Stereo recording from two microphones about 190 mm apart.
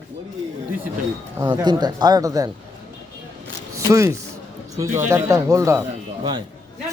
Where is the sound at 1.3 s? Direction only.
20° right (ahead or behind).